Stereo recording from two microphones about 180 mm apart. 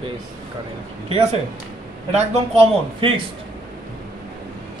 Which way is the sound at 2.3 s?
30° right (ahead or behind).